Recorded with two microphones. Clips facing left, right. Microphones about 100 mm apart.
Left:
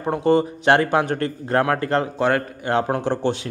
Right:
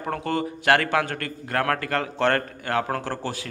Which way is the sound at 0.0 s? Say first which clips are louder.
Left 8 dB; 20° left (ahead or behind).